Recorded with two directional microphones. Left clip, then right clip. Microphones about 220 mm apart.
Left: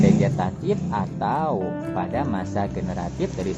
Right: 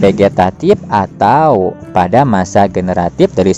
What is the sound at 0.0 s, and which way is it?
Speech, 40° right (ahead or behind).